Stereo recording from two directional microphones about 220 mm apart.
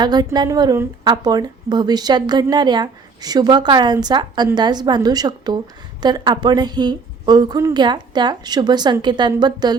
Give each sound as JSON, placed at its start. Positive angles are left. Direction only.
{"t": 0.0, "sound": "a woman's voice", "side_deg": -20}